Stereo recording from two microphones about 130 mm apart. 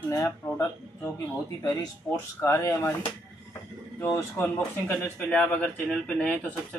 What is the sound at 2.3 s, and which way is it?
Speech, 20° left (ahead or behind).